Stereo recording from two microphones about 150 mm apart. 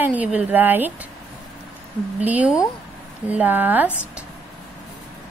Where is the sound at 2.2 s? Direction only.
10° right (ahead or behind).